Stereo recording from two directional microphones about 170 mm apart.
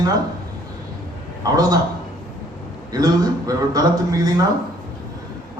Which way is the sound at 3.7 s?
20° right (ahead or behind).